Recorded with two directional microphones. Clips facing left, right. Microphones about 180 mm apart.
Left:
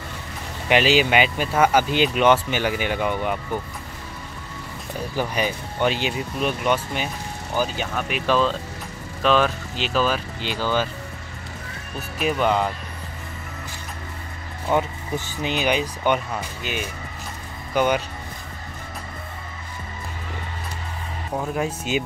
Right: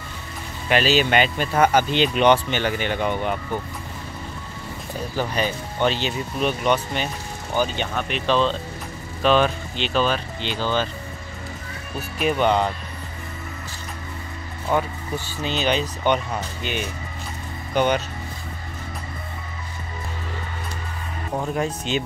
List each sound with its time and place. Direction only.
0.7 s speech: 15° left (ahead or behind)
5.1 s speech: 10° left (ahead or behind)
12.2 s speech: centre (ahead or behind)
14.7 s speech: 20° left (ahead or behind)
21.5 s speech: 5° left (ahead or behind)